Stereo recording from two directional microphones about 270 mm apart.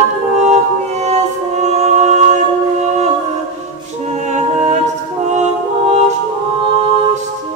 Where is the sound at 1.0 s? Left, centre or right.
Right.